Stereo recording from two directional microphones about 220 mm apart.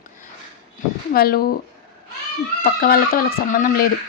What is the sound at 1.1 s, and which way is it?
Speech, 45° left (ahead or behind).